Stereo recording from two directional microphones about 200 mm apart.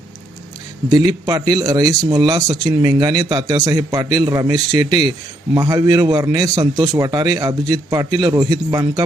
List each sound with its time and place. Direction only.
0.9 s a man's voice: 20° right (ahead or behind)